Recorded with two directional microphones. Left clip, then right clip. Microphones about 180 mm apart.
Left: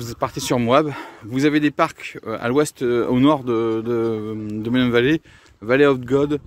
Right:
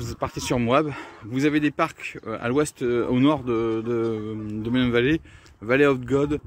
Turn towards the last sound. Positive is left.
turn(degrees=20)  # may be behind; listen again after turning